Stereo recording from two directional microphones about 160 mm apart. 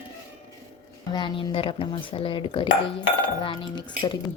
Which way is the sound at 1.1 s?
30° left (ahead or behind).